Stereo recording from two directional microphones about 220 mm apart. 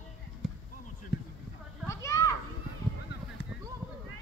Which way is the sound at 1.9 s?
15° left (ahead or behind).